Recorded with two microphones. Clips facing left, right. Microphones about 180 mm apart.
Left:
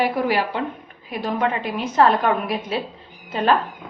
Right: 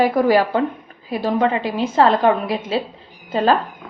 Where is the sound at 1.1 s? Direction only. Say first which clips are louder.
Right 4 dB; 30° right (ahead or behind).